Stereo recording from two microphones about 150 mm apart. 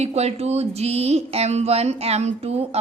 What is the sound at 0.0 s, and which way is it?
A woman's voice, 45° right (ahead or behind).